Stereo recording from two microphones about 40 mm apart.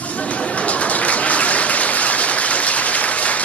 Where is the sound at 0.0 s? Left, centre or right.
Left.